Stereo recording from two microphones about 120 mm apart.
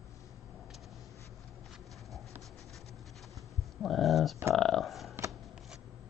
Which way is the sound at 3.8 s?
Centre (ahead or behind).